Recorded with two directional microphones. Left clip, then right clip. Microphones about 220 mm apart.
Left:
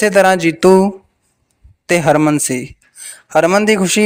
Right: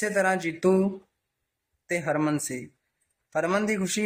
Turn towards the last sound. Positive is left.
turn(degrees=40)  # may be behind; listen again after turning